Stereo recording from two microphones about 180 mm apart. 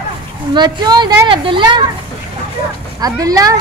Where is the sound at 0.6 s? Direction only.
25° right (ahead or behind).